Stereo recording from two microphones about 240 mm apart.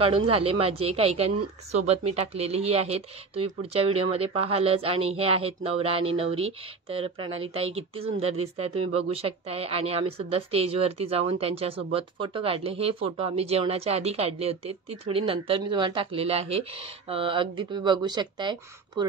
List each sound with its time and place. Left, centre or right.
0.0 s a woman's voice: right